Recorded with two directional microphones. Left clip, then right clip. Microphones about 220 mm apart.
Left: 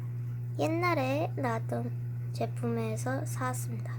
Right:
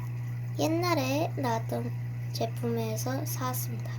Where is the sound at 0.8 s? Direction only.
25° left (ahead or behind).